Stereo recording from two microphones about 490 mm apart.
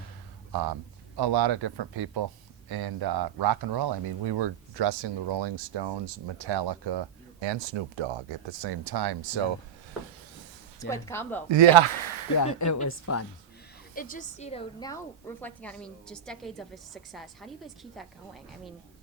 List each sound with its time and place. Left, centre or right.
0.5 s speech: right
10.8 s a woman's voice: centre
11.4 s speech: right
12.4 s a woman's voice: left
13.9 s a woman's voice: centre